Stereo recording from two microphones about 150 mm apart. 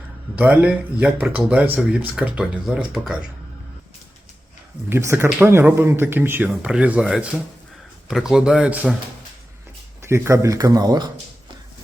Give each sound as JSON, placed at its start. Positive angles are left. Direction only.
{"t": 0.3, "sound": "speech", "side_deg": -10}
{"t": 4.9, "sound": "speech", "side_deg": -15}
{"t": 10.0, "sound": "speech", "side_deg": -15}